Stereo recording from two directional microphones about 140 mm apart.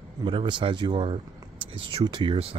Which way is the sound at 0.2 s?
35° right (ahead or behind).